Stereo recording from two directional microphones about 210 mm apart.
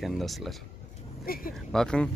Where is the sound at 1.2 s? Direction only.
45° left (ahead or behind).